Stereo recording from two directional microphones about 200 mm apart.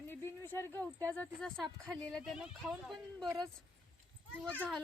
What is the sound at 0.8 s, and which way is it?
Speech, 10° left (ahead or behind).